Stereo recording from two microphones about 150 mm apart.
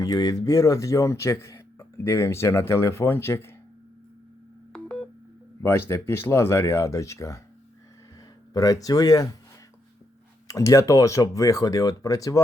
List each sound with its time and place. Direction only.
0.0 s speech: 25° left (ahead or behind)
4.7 s telephone dialing: 5° left (ahead or behind)
5.6 s speech: 15° left (ahead or behind)
8.5 s speech: 25° left (ahead or behind)
10.5 s speech: 20° left (ahead or behind)